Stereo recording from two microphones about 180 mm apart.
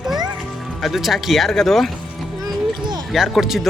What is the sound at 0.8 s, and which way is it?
Speech, centre (ahead or behind).